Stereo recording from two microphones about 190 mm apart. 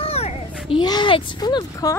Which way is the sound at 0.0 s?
30° left (ahead or behind).